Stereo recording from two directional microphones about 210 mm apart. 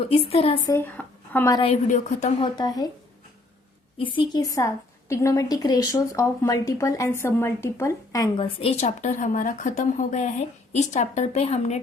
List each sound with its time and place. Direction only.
0.0 s a woman's voice: 30° left (ahead or behind)
0.7 s speech: 10° left (ahead or behind)
1.6 s a woman's voice: 35° left (ahead or behind)
2.4 s a woman's voice: 20° left (ahead or behind)
3.9 s a woman's voice: 25° left (ahead or behind)